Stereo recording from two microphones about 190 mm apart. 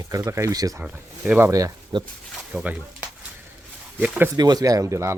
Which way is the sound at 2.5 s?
5° right (ahead or behind).